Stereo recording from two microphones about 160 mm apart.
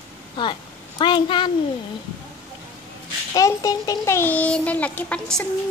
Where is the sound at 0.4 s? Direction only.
30° left (ahead or behind).